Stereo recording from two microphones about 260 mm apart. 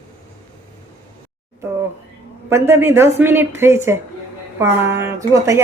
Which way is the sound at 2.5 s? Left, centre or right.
Centre.